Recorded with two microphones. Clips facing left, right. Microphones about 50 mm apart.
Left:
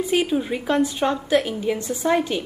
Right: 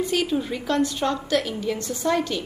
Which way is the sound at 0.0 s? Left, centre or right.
Centre.